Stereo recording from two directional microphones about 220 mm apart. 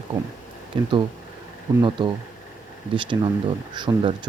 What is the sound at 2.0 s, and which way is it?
Speech, 20° right (ahead or behind).